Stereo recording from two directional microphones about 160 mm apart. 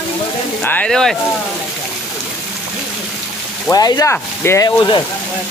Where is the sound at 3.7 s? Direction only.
25° left (ahead or behind).